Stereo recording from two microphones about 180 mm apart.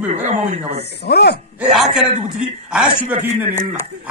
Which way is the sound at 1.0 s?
65° left (ahead or behind).